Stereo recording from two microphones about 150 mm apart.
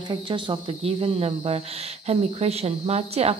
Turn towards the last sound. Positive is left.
turn(degrees=-45)  # may be behind; listen again after turning